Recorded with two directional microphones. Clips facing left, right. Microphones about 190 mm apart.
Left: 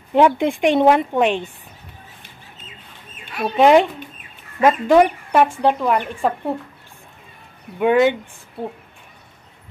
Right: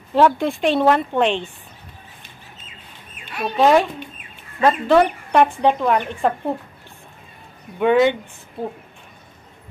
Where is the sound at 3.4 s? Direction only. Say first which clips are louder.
Left 2 dB; 15° left (ahead or behind); by 6.3 s centre (ahead or behind).